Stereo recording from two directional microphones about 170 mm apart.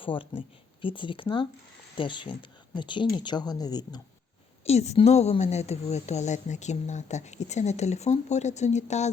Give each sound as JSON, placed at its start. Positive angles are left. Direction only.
{"t": 0.0, "sound": "a woman's voice", "side_deg": 30}
{"t": 4.6, "sound": "a woman's voice", "side_deg": 40}